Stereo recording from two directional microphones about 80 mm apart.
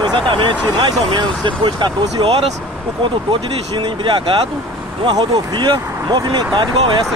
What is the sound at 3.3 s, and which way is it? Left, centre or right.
Speech, right.